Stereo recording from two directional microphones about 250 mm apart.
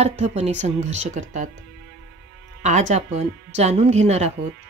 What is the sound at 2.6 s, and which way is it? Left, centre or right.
Speech, right.